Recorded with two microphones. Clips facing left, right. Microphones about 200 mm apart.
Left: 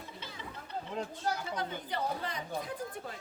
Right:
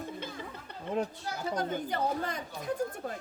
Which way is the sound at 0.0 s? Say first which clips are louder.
Right 8 dB; 50° right (ahead or behind).